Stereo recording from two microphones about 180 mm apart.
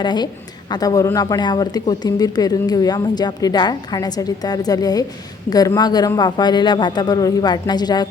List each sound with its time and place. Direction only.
0.0 s speech: 25° left (ahead or behind)